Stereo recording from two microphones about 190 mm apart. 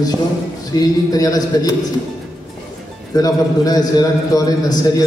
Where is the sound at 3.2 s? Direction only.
20° left (ahead or behind).